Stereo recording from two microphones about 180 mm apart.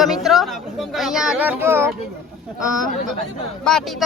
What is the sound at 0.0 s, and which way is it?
Speech, centre (ahead or behind).